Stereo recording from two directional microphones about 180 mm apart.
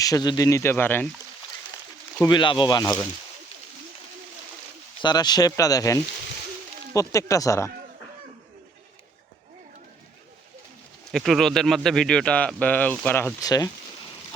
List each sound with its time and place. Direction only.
0.0 s speech: 20° left (ahead or behind)
2.2 s speech: 25° left (ahead or behind)
4.9 s speech: 25° left (ahead or behind)
11.1 s a man's voice: centre (ahead or behind); by 13.7 s 20° left (ahead or behind)